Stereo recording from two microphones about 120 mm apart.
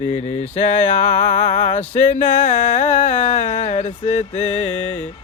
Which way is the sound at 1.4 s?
90° left.